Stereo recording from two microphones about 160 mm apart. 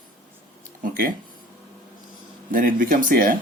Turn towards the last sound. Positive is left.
turn(degrees=-60)  # may be behind; listen again after turning